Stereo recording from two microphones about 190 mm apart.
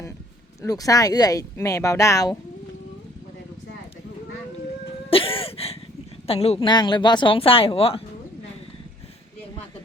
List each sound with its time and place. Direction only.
0.6 s speech: 20° left (ahead or behind)
5.1 s music: 30° left (ahead or behind)
6.2 s speech: 30° left (ahead or behind)